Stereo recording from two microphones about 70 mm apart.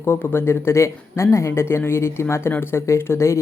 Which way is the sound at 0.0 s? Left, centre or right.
Left.